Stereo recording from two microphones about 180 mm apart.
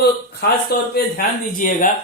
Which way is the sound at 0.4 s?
70° left (ahead or behind).